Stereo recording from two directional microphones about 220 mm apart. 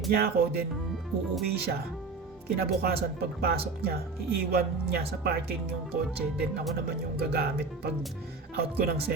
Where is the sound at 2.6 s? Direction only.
45° right (ahead or behind).